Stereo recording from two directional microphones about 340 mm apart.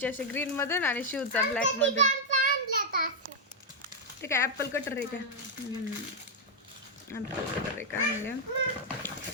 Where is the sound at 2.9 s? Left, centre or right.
Right.